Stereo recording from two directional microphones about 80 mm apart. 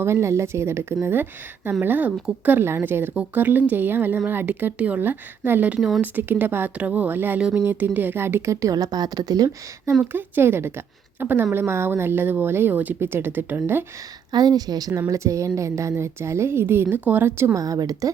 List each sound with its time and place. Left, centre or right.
0.0 s a woman's voice: right
8.7 s a woman's voice: right
10.0 s speech: right
14.3 s a woman's voice: right
15.0 s a woman's voice: right
17.6 s a woman's voice: right